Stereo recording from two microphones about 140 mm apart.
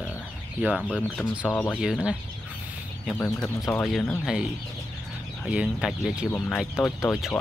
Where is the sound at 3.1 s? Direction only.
15° left (ahead or behind).